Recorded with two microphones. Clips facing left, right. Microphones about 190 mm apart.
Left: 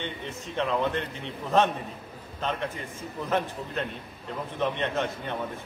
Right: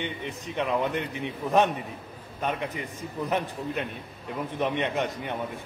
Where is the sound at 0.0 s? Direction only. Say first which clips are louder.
Right 2 dB; 15° right (ahead or behind).